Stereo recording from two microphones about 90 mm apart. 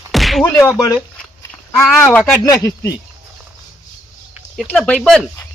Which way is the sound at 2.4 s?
35° left (ahead or behind).